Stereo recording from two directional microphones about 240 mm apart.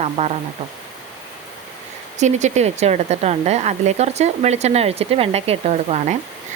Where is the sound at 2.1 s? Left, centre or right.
Right.